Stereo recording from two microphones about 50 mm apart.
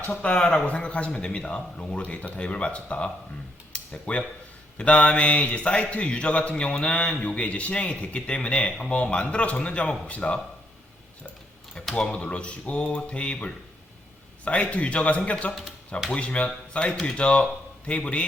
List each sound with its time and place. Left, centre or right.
0.1 s a man's voice: left
3.7 s a sound: left
4.8 s a man's voice: left
11.9 s a man's voice: left